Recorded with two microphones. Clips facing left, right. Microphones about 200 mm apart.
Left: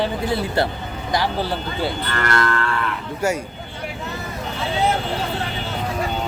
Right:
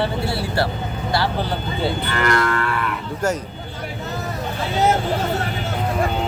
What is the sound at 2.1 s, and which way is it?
Moo, 10° right (ahead or behind).